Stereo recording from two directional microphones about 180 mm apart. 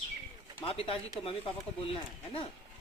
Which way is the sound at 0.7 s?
30° left (ahead or behind).